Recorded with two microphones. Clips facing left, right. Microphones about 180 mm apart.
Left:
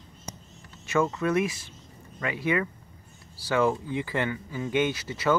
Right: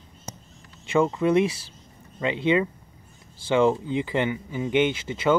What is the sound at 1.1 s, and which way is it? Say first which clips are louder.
Speech: right 5 dB; 25° right (ahead or behind).